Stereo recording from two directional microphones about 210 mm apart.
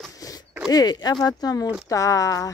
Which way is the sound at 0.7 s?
20° left (ahead or behind).